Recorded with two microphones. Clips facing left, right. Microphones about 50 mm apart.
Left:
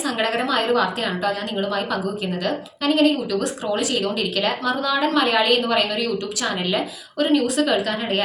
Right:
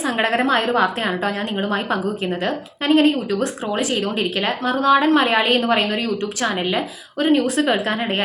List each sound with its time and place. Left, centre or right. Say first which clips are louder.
0.0 s a woman's voice: right 3 dB; right